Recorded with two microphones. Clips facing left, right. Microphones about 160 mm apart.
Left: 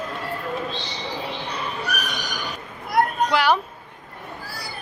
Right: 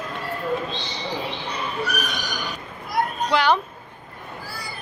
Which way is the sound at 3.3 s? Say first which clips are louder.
Even; 5° left (ahead or behind).